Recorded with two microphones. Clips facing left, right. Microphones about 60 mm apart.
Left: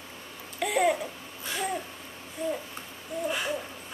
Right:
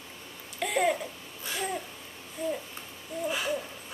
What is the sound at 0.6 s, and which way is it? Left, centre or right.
Babbling, centre.